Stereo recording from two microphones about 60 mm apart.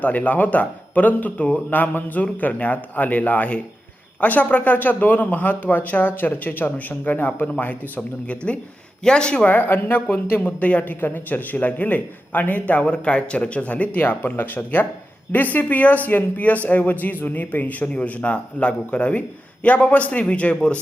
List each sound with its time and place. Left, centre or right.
0.0 s a woman's voice: left
9.5 s a woman's voice: left; by 20.7 s centre